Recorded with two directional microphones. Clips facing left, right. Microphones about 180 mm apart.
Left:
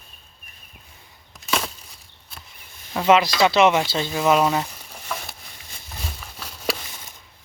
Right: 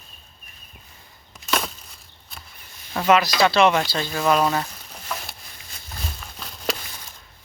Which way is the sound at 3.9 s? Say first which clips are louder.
Left 2 dB; 20° left (ahead or behind).